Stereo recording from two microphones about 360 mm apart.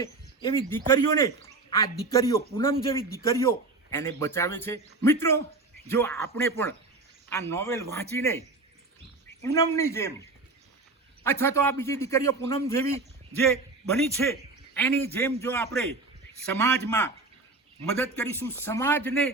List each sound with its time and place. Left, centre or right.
0.0 s a man's voice: centre
14.8 s a man's voice: centre